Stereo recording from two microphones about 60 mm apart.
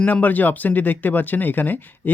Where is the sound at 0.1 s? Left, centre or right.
Left.